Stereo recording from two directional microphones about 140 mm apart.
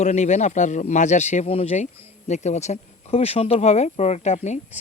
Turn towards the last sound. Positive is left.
turn(degrees=55)  # may be behind; listen again after turning